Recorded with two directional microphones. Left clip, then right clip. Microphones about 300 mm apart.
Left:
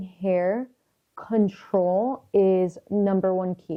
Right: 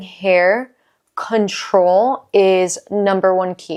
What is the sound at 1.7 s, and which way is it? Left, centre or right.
Speech, centre.